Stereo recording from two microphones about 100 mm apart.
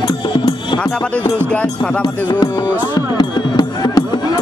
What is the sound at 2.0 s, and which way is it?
Music, 50° left (ahead or behind).